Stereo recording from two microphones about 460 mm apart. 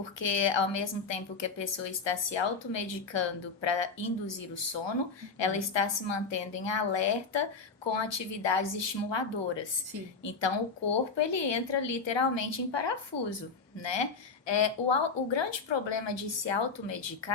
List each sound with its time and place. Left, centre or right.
0.2 s a woman's voice: left
11.2 s a woman's voice: left